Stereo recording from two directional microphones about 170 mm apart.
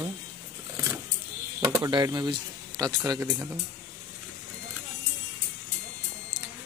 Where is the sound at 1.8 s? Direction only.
20° right (ahead or behind).